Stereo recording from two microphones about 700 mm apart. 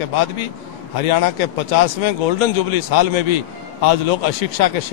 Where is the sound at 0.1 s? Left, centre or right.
Left.